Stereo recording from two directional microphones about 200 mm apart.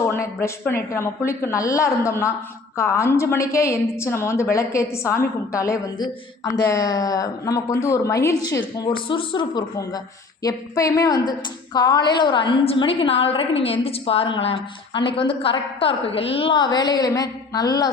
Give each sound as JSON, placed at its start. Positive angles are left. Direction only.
{"t": 0.0, "sound": "a woman's voice", "side_deg": 15}